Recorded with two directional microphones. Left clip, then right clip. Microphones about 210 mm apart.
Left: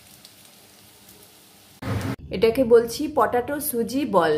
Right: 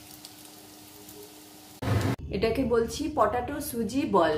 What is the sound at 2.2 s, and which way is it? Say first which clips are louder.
A woman's voice: left 10 dB; 45° left (ahead or behind).